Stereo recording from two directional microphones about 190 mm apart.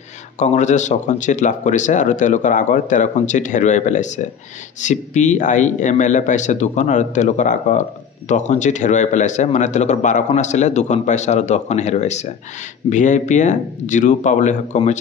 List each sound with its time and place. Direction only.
0.4 s speech: 40° left (ahead or behind)